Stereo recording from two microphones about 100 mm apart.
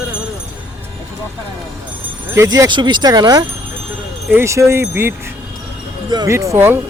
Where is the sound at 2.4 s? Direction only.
40° right (ahead or behind).